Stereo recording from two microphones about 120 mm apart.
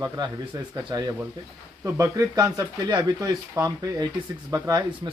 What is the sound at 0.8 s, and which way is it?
Speech, 30° right (ahead or behind).